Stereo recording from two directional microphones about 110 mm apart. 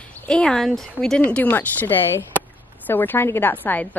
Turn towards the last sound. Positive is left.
turn(degrees=20)  # may be behind; listen again after turning